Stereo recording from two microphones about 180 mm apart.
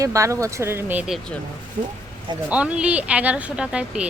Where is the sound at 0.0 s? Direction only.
15° right (ahead or behind).